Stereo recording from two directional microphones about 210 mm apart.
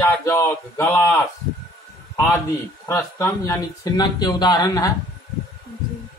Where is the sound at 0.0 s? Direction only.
15° left (ahead or behind).